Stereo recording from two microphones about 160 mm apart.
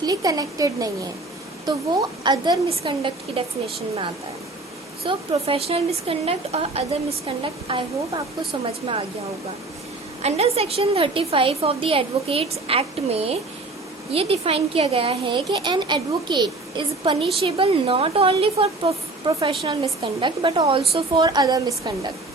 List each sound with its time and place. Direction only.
0.0 s a woman's voice: 25° right (ahead or behind)
2.6 s a woman's voice: 35° right (ahead or behind)
5.0 s a woman's voice: 35° right (ahead or behind)
10.2 s a woman's voice: 40° right (ahead or behind); by 21.6 s 25° right (ahead or behind)